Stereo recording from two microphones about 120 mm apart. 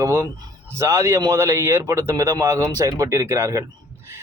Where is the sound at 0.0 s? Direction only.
25° right (ahead or behind).